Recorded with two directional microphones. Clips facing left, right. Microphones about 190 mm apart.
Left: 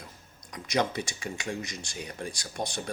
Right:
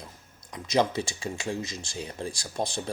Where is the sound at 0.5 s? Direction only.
25° right (ahead or behind).